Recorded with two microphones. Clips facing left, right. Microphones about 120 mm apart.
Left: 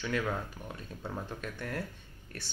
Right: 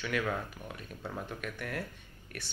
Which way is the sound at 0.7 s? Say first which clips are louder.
Left 1 dB; 25° left (ahead or behind).